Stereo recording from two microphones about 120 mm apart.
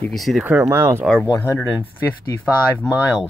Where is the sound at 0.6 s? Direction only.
25° right (ahead or behind).